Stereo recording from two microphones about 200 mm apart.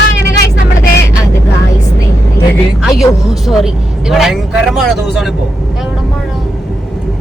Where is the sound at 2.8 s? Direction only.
Centre (ahead or behind).